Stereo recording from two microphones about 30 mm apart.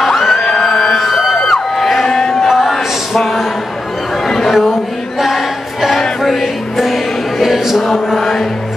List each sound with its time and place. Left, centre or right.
0.0 s music: centre
0.4 s music: left
0.9 s music: centre
1.4 s crowd: centre
2.4 s music: centre
3.1 s a sound: centre
4.5 s a sound: centre
5.2 s choir: centre
6.2 s music: centre
7.6 s mantra: centre
8.2 s music: centre